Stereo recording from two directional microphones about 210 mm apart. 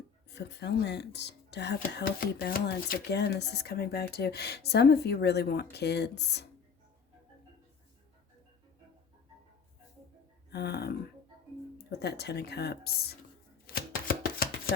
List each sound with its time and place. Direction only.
0.3 s speech: 55° left (ahead or behind)
10.5 s speech: 50° left (ahead or behind)
13.7 s chopping: 45° left (ahead or behind)